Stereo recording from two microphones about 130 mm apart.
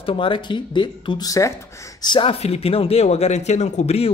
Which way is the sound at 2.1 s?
40° left (ahead or behind).